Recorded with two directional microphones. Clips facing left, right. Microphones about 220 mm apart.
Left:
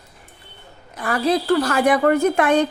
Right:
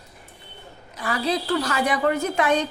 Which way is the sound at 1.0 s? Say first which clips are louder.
Left 5 dB; 55° left (ahead or behind).